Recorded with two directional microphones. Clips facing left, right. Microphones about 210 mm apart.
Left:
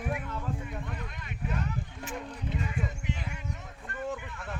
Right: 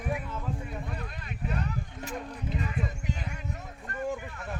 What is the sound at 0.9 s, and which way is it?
Speech, 35° right (ahead or behind).